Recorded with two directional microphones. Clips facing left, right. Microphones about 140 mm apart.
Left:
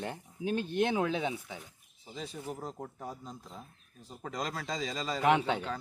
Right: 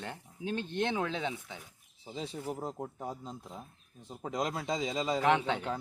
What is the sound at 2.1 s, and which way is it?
A man's voice, 25° right (ahead or behind).